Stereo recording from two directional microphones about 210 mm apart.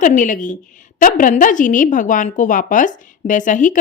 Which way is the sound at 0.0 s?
40° left (ahead or behind).